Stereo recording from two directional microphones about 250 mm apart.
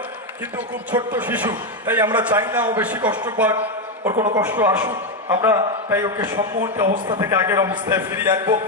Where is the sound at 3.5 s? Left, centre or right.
Right.